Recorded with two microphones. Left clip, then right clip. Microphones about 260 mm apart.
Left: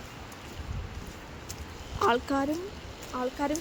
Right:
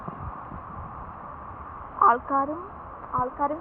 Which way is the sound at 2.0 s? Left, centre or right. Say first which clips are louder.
Right 6 dB; centre.